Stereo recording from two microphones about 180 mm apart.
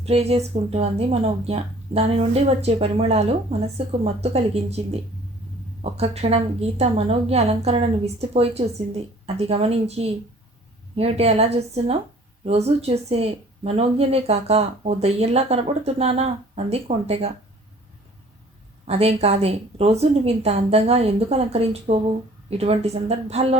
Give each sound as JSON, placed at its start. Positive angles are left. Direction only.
{"t": 0.0, "sound": "speech", "side_deg": -35}
{"t": 18.9, "sound": "speech", "side_deg": -35}